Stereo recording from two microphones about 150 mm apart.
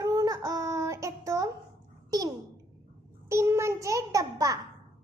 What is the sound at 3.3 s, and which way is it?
A child's voice, 20° right (ahead or behind).